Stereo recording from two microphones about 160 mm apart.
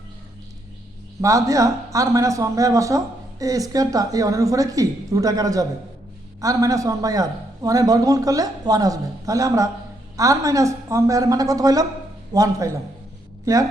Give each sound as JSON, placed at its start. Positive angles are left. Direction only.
{"t": 1.2, "sound": "speech", "side_deg": -20}